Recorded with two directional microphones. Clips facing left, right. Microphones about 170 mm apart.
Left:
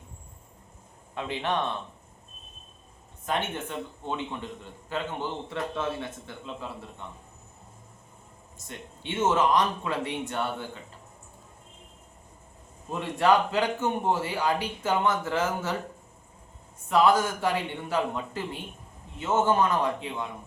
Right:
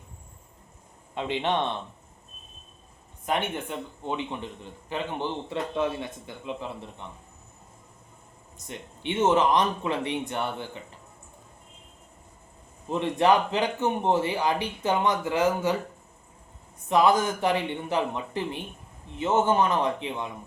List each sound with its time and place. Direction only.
1.1 s speech: 20° right (ahead or behind)
3.2 s speech: 15° right (ahead or behind)
8.6 s speech: 15° right (ahead or behind)
12.9 s speech: 20° right (ahead or behind)
16.9 s speech: 20° right (ahead or behind)